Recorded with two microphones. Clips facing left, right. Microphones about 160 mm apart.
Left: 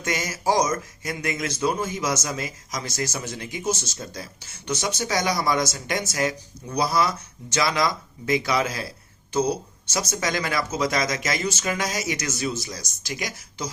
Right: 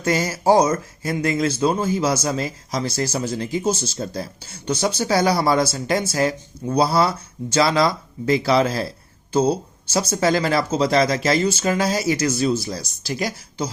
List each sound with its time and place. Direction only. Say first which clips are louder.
0.0 s speech: right 6 dB; 30° right (ahead or behind)